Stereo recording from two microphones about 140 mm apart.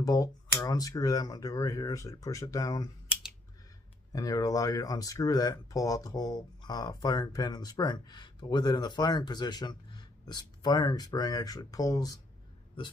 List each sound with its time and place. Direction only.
0.0 s speech: 25° left (ahead or behind)
4.1 s speech: 25° left (ahead or behind)